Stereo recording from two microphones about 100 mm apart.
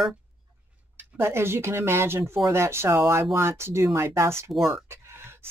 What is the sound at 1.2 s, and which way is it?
Speech, 25° right (ahead or behind).